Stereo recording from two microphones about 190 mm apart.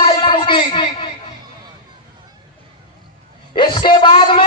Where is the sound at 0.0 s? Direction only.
25° left (ahead or behind).